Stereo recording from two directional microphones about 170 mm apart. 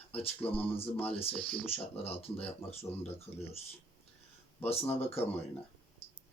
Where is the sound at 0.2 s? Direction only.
35° left (ahead or behind).